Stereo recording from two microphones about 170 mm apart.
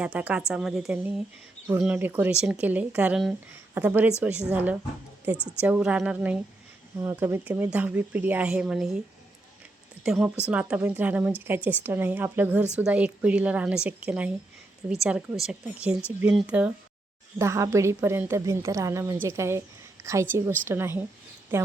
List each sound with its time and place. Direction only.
0.0 s a woman's voice: 10° right (ahead or behind)
10.0 s a woman's voice: 5° right (ahead or behind)